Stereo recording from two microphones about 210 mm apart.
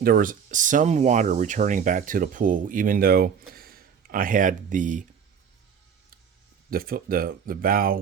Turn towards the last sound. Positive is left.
turn(degrees=-45)  # may be behind; listen again after turning